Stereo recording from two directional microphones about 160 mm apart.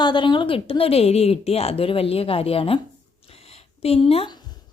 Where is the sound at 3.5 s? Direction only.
40° left (ahead or behind).